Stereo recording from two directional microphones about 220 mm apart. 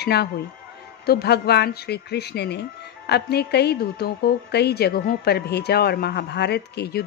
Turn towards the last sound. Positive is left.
turn(degrees=45)  # may be behind; listen again after turning